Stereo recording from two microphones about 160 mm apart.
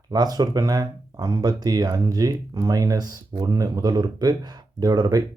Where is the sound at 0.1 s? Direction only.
25° right (ahead or behind).